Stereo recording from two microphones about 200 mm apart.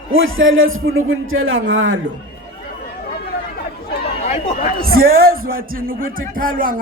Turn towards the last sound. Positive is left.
turn(degrees=-45)  # may be behind; listen again after turning